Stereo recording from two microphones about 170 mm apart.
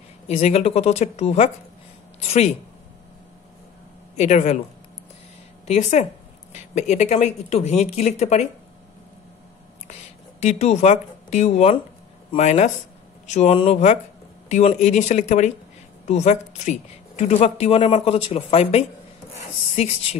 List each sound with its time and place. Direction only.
0.3 s a woman's voice: 40° left (ahead or behind)
4.2 s speech: 45° left (ahead or behind)
5.7 s a woman's voice: 40° left (ahead or behind)
10.4 s a woman's voice: 40° left (ahead or behind)